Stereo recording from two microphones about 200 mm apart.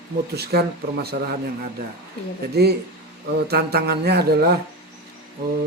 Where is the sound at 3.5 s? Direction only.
50° right (ahead or behind).